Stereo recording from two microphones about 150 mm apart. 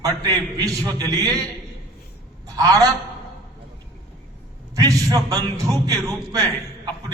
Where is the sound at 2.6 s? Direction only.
20° right (ahead or behind).